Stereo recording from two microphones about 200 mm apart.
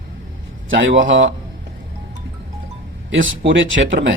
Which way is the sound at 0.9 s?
70° right (ahead or behind).